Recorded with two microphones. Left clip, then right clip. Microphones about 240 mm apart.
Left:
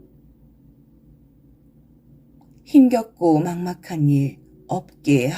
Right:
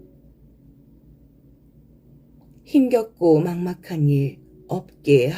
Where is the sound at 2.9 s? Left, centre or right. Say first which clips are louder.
Right 2 dB; left.